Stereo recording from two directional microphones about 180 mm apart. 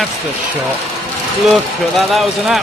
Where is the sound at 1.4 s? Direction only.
Centre (ahead or behind).